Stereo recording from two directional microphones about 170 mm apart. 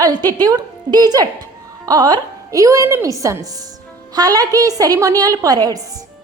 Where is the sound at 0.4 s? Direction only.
25° right (ahead or behind).